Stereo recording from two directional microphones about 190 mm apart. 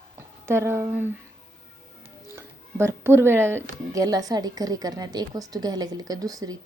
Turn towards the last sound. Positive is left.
turn(degrees=-20)  # may be behind; listen again after turning